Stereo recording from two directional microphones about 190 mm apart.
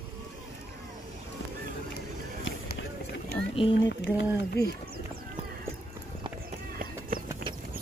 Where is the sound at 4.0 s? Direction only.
65° left (ahead or behind).